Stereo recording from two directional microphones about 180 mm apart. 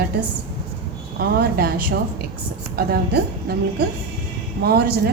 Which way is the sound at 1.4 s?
60° right (ahead or behind).